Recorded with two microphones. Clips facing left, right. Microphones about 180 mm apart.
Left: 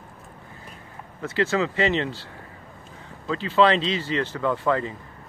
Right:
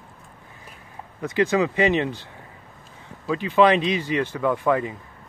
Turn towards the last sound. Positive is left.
turn(degrees=-15)  # may be behind; listen again after turning